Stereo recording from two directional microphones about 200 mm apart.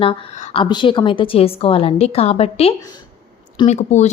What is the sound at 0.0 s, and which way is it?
A woman's voice, 25° left (ahead or behind).